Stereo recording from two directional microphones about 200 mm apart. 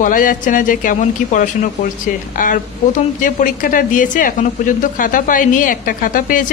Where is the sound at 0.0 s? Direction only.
40° left (ahead or behind).